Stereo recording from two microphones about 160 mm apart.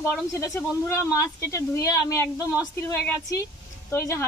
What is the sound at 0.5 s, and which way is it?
Speech, 20° left (ahead or behind).